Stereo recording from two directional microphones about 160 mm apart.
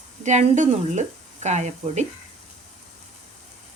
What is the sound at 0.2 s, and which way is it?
Speech, 50° right (ahead or behind).